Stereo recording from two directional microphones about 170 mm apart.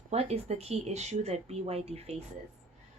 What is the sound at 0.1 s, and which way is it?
Speech, 40° right (ahead or behind).